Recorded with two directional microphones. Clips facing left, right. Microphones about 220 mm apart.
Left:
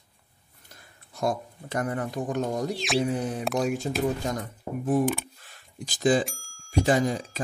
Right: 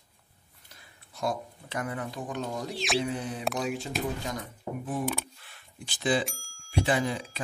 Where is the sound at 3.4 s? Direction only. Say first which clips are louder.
Left 4 dB; centre (ahead or behind).